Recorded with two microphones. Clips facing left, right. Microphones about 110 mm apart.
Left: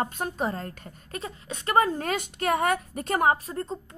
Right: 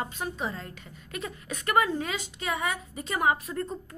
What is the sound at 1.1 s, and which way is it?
Speech, 30° left (ahead or behind).